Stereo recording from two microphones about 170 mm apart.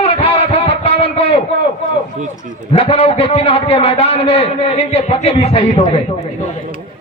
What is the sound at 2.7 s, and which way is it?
A man's voice, 35° left (ahead or behind).